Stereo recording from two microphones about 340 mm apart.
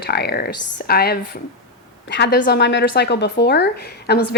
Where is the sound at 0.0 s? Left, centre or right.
Left.